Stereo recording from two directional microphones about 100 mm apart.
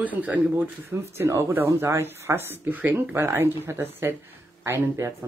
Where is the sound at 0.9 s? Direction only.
30° right (ahead or behind).